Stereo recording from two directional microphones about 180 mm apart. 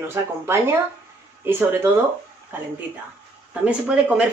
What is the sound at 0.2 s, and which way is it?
Speech, 15° right (ahead or behind).